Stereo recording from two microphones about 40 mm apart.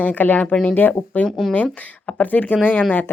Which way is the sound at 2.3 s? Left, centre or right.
Left.